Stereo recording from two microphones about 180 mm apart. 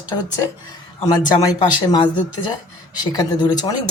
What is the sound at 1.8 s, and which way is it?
Speech, 25° left (ahead or behind).